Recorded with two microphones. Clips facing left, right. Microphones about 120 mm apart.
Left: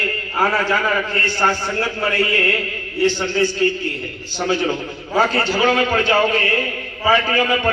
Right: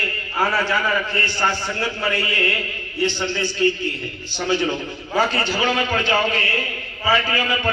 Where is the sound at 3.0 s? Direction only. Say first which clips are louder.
Left 5 dB; 45° left (ahead or behind).